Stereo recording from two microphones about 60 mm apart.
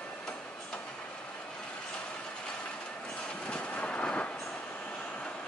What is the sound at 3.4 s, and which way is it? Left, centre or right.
Vehicle, centre.